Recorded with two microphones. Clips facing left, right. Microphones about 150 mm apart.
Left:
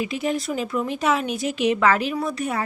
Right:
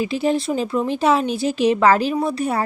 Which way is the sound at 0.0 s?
30° right (ahead or behind).